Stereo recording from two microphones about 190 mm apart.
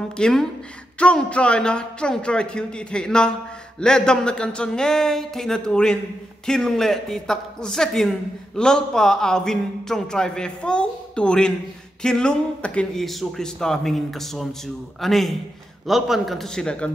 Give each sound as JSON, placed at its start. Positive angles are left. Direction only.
{"t": 0.2, "sound": "speech", "side_deg": 5}